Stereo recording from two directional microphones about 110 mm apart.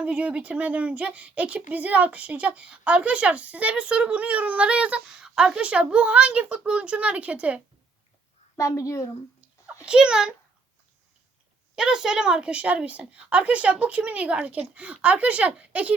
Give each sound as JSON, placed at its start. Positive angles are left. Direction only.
{"t": 0.0, "sound": "speech", "side_deg": -10}
{"t": 8.5, "sound": "a woman's voice", "side_deg": 30}
{"t": 9.6, "sound": "a child's voice", "side_deg": -10}
{"t": 11.8, "sound": "speech", "side_deg": -5}